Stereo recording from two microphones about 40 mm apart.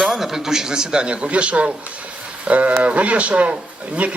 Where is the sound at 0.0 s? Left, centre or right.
Centre.